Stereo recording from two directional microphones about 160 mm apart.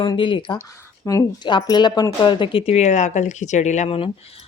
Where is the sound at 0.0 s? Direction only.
30° left (ahead or behind).